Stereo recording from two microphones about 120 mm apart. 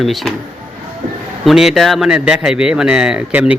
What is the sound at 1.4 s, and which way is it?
Speech, 5° right (ahead or behind).